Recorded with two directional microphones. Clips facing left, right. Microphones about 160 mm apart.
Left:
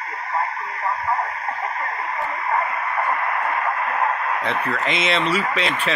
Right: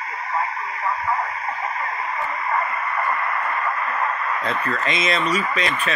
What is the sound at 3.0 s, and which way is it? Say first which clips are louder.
Radio: left 1 dB; 55° left (ahead or behind).